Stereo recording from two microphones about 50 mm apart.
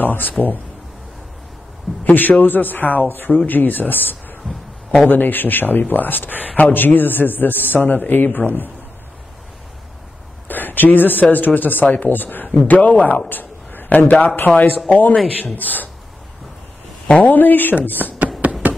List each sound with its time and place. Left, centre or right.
0.0 s a man's voice: left
2.0 s a man's voice: left
10.5 s a man's voice: left
17.1 s a man's voice: left
18.4 s tap: right